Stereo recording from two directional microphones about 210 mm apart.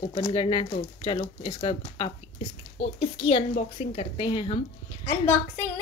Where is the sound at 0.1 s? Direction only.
20° left (ahead or behind).